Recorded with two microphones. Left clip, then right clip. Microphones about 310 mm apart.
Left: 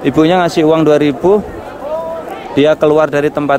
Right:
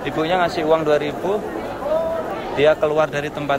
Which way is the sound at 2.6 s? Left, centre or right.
Left.